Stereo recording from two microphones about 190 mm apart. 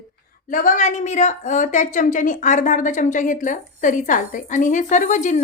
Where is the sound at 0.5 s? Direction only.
45° left (ahead or behind).